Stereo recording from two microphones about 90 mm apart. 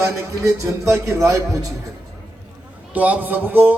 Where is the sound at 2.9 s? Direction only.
15° right (ahead or behind).